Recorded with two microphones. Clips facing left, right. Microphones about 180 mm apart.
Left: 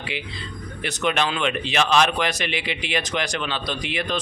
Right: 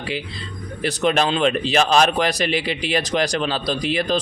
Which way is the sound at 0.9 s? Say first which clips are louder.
Right 4 dB; 35° right (ahead or behind).